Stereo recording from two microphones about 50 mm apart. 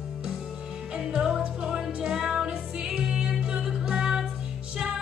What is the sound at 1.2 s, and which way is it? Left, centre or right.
Music, centre.